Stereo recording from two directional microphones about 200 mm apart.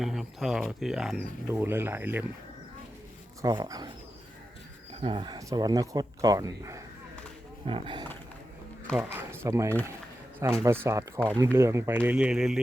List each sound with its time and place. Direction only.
0.0 s speech: centre (ahead or behind)
3.4 s speech: 20° right (ahead or behind)
4.9 s speech: 25° right (ahead or behind)
9.1 s speech: 10° right (ahead or behind)